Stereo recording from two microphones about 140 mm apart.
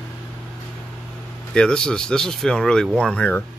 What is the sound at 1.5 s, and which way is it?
Speech, 5° left (ahead or behind).